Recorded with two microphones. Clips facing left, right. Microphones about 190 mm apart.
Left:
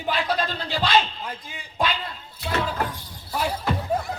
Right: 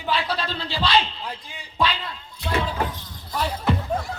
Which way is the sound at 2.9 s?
10° left (ahead or behind).